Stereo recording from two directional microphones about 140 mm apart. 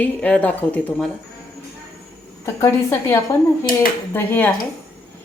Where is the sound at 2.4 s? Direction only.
20° left (ahead or behind).